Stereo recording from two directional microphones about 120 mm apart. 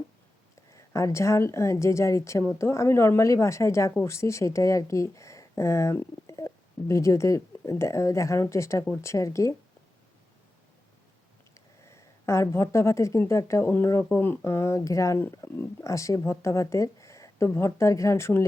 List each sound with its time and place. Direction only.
0.7 s speech: 25° left (ahead or behind)
11.9 s speech: 25° left (ahead or behind)